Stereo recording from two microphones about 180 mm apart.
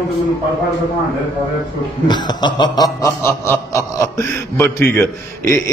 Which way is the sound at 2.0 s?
25° left (ahead or behind).